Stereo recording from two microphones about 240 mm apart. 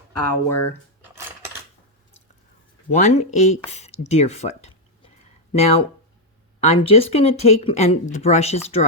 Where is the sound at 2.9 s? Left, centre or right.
Left.